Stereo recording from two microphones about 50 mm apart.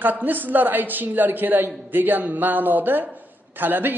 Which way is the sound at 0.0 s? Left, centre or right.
Right.